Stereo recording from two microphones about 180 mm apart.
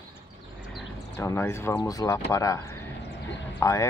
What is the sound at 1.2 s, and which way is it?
Speech, 15° left (ahead or behind).